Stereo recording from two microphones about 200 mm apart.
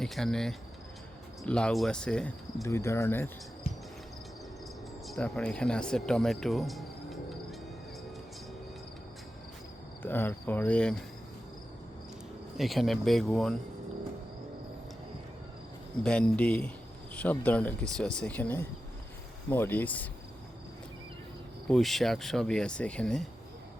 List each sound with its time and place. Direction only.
0.0 s speech: centre (ahead or behind)
2.6 s speech: 15° left (ahead or behind)
5.0 s speech: centre (ahead or behind)
10.0 s speech: 10° left (ahead or behind)
12.5 s speech: centre (ahead or behind)
16.0 s speech: 5° left (ahead or behind)
21.7 s speech: centre (ahead or behind)